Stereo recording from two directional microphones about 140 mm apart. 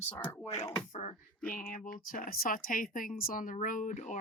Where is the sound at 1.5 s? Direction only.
85° left; by 4.2 s 60° left (ahead or behind).